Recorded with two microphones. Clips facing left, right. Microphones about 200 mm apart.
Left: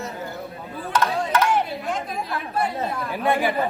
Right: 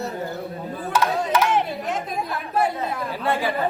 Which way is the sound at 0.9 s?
10° right (ahead or behind).